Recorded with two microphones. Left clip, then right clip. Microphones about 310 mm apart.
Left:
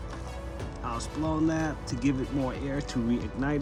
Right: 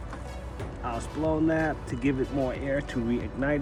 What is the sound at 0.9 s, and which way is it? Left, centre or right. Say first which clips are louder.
Speech: right 3 dB; centre.